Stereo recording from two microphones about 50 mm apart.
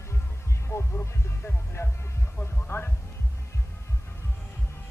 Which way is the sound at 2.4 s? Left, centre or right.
Left.